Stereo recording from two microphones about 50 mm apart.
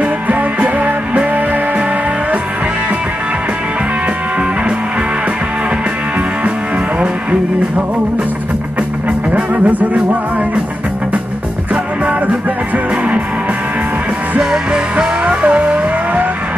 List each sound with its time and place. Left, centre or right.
0.0 s music: right
7.0 s music: right
9.3 s music: right
9.9 s music: right
11.7 s music: right
14.4 s music: centre